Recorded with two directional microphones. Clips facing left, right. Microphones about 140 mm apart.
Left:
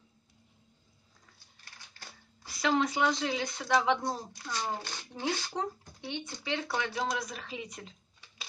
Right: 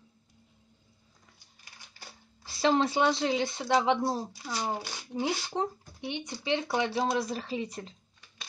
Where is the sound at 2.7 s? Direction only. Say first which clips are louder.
Right 3 dB; 30° right (ahead or behind).